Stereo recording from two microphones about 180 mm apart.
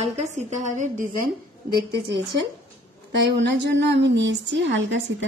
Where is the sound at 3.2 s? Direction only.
75° right (ahead or behind).